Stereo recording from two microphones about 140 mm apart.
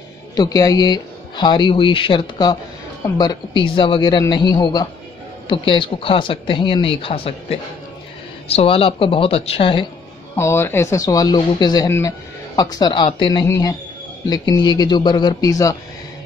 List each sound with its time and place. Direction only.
0.4 s speech: 25° left (ahead or behind)
10.3 s speech: 20° left (ahead or behind)